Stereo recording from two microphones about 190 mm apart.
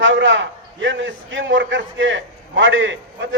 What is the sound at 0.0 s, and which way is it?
A man's voice, 80° right.